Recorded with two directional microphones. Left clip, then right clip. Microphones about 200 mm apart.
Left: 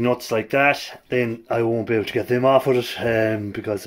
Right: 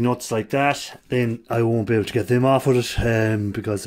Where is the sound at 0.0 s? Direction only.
15° right (ahead or behind).